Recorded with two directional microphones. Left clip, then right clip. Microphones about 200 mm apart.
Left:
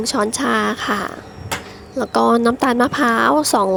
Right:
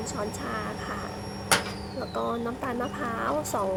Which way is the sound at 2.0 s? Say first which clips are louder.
Left 16 dB; 50° left (ahead or behind).